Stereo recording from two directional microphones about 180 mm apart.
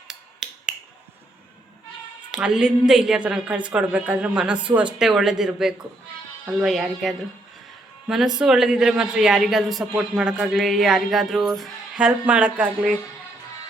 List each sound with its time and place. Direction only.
0.1 s finger snapping: 5° right (ahead or behind)
2.3 s a woman's voice: 5° right (ahead or behind)